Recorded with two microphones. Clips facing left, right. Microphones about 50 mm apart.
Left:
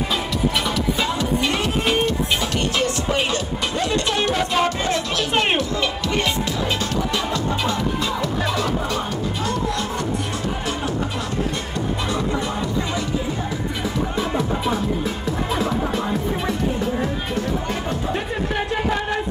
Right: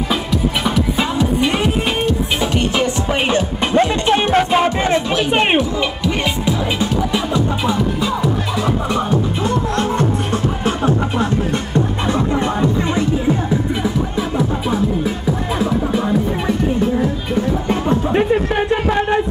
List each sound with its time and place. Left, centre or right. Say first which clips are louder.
0.1 s music: right 5 dB; centre
14.1 s music: right 3 dB; centre
17.6 s music: right 7 dB; right